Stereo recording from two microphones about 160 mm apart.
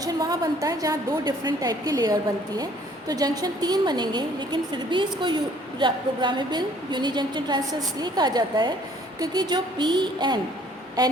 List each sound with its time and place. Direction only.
0.0 s a woman's voice: 25° right (ahead or behind)